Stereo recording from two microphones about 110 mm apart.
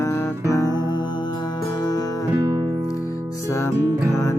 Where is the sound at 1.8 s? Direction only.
35° left (ahead or behind).